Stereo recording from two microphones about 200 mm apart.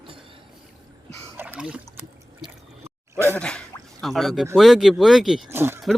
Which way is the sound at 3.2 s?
5° left (ahead or behind).